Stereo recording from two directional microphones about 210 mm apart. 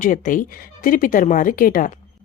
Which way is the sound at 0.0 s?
40° left (ahead or behind).